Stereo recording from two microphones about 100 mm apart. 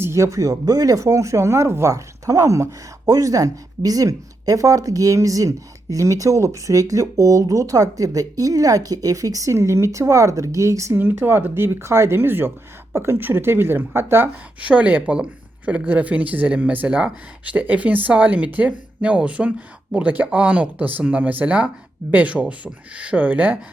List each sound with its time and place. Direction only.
0.0 s a woman's voice: 30° right (ahead or behind)